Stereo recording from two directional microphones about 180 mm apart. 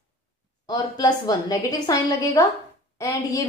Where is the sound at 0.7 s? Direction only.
20° left (ahead or behind).